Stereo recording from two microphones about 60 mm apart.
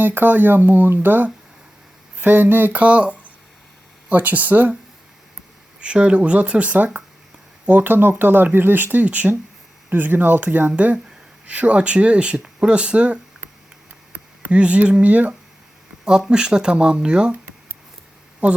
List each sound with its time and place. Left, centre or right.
0.0 s speech: right
5.8 s speech: centre